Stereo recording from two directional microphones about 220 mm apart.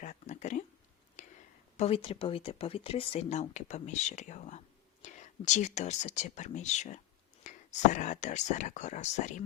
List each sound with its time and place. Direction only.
0.0 s a sound: 35° left (ahead or behind)
1.2 s whispering: 35° left (ahead or behind)
1.7 s speech: 25° left (ahead or behind)